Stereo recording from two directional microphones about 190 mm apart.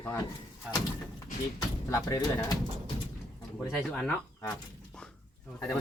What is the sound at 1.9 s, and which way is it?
Speech, 15° left (ahead or behind).